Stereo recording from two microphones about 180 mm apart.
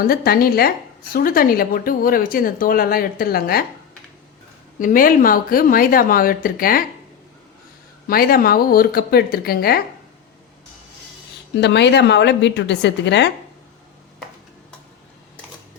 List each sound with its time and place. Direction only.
0.0 s speech: 55° left (ahead or behind)
4.8 s speech: 50° left (ahead or behind)
8.0 s speech: 55° left (ahead or behind)
11.6 s a woman's voice: 75° left (ahead or behind)